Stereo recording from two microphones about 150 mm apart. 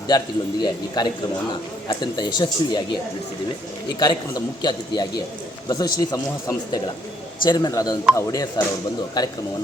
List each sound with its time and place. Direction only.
0.6 s speech: 30° left (ahead or behind)
4.0 s speech: 30° left (ahead or behind)